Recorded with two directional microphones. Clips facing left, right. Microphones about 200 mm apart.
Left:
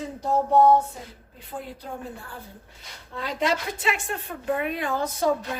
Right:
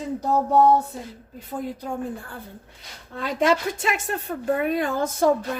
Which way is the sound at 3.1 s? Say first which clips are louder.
Right 5 dB; 50° right (ahead or behind).